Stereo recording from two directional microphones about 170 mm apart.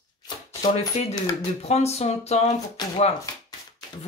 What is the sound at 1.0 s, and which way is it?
Speech, 40° left (ahead or behind).